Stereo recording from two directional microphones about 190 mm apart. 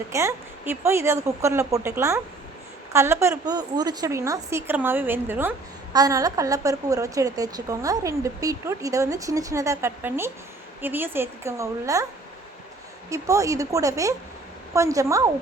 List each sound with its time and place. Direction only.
0.1 s a woman's voice: 15° right (ahead or behind)
13.1 s a woman's voice: 15° right (ahead or behind)